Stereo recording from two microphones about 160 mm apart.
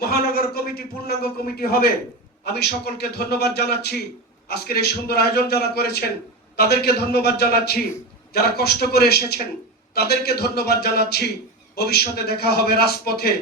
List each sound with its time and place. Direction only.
0.0 s a man's voice: 75° left (ahead or behind)
2.4 s a man's voice: 90° left